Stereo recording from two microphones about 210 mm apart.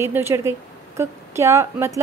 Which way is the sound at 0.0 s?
10° right (ahead or behind).